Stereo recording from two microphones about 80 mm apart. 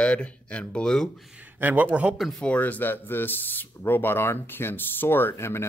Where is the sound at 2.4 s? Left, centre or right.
Centre.